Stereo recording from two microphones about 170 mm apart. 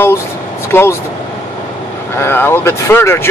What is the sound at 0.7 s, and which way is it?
Speech, 15° left (ahead or behind).